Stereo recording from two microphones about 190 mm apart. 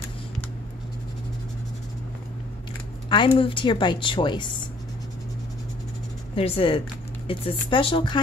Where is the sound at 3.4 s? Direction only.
25° left (ahead or behind).